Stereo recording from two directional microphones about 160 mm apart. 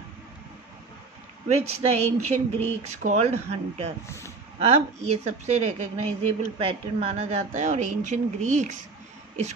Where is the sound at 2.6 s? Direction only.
45° right (ahead or behind).